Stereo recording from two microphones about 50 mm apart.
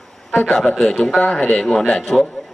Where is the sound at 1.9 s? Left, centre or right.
Centre.